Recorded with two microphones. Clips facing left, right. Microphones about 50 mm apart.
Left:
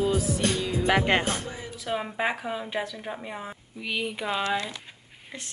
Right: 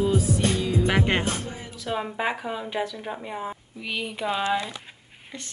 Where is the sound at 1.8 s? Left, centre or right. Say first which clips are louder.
Right 1 dB; centre.